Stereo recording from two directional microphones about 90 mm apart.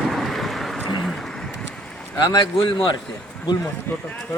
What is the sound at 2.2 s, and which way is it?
Speech, 55° left (ahead or behind).